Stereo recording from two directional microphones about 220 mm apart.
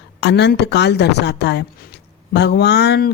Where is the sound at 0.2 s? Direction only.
50° left (ahead or behind).